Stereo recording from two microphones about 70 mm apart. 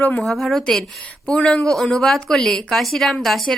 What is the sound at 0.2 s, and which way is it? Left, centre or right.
A woman's voice, centre.